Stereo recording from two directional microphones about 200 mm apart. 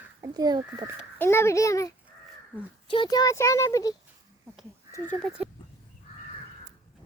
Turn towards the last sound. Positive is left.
turn(degrees=-5)  # may be behind; listen again after turning